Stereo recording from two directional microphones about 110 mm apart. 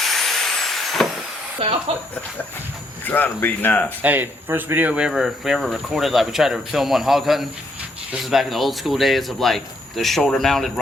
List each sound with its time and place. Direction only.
0.0 s a sound: centre (ahead or behind)
1.6 s speech: 60° right (ahead or behind)
3.0 s speech: 15° left (ahead or behind)
4.0 s speech: 15° right (ahead or behind); by 10.7 s 5° left (ahead or behind)